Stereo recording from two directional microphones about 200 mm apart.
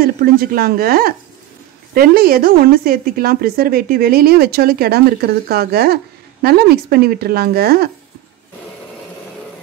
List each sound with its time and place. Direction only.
0.0 s a woman's voice: 50° right (ahead or behind)